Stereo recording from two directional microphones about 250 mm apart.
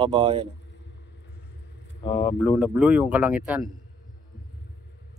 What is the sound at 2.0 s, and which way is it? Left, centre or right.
Speech, centre.